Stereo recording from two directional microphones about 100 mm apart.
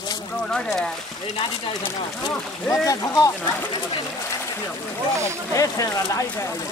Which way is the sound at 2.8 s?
35° left (ahead or behind).